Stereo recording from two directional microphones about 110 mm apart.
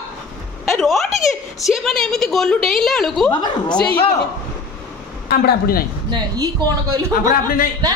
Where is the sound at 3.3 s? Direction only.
40° left (ahead or behind).